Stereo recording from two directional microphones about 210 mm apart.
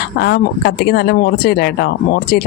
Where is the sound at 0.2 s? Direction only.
50° left (ahead or behind).